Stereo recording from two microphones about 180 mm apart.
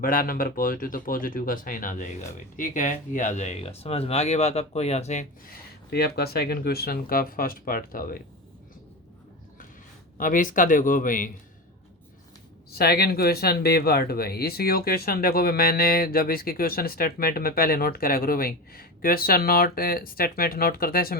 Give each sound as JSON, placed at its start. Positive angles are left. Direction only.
{"t": 0.0, "sound": "speech", "side_deg": 50}
{"t": 5.5, "sound": "speech", "side_deg": 60}
{"t": 10.2, "sound": "speech", "side_deg": 50}
{"t": 12.7, "sound": "speech", "side_deg": 60}